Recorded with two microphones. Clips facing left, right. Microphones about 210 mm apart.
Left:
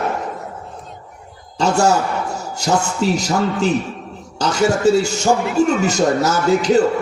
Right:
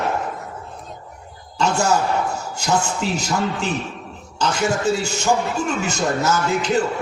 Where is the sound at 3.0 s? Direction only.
40° left (ahead or behind).